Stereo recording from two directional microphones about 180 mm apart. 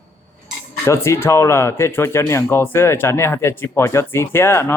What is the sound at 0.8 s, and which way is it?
Speech, 15° left (ahead or behind).